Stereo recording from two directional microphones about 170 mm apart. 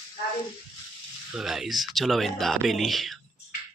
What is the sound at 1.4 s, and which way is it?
Speech, centre (ahead or behind).